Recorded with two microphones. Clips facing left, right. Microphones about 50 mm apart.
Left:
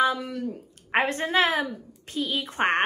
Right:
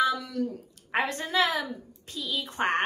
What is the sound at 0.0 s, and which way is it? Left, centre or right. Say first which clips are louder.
A woman's voice: left 2 dB; left.